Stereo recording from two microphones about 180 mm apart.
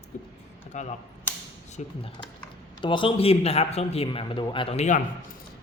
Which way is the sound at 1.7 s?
30° left (ahead or behind).